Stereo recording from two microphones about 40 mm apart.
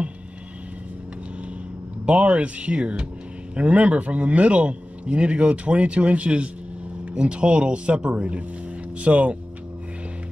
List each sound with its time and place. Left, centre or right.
2.0 s speech: right